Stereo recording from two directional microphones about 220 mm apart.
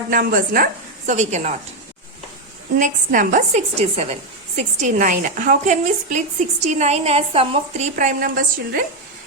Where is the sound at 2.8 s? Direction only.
40° right (ahead or behind).